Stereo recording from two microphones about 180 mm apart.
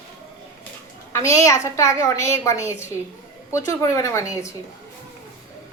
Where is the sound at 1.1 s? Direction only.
15° left (ahead or behind).